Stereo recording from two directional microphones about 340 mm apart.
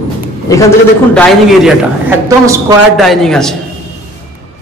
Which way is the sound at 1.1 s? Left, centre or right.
Centre.